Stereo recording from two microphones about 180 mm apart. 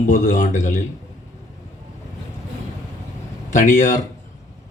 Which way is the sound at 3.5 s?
40° left (ahead or behind).